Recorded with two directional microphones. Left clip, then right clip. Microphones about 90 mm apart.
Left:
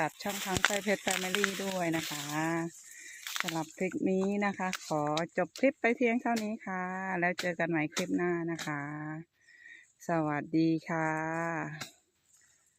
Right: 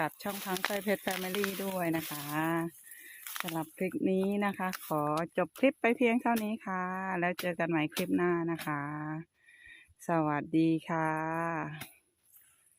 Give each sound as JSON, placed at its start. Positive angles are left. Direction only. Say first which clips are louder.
{"t": 0.0, "sound": "speech", "louder": "left 1 dB", "side_deg": -10}
{"t": 3.3, "sound": "speech", "louder": "left 2 dB", "side_deg": -15}
{"t": 8.6, "sound": "speech", "louder": "right 1 dB", "side_deg": -30}